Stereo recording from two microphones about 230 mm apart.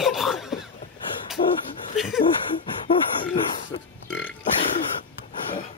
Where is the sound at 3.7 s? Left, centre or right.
Left.